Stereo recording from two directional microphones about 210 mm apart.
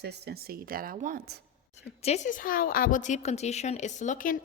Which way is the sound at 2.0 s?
30° left (ahead or behind).